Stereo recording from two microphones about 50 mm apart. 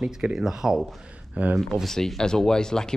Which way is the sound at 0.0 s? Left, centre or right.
Centre.